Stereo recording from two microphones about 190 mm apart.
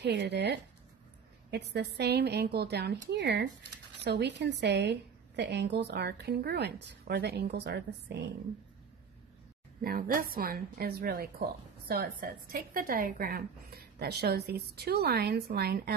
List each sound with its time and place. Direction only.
0.0 s a woman's voice: 65° right (ahead or behind)
9.8 s a woman's voice: 50° right (ahead or behind)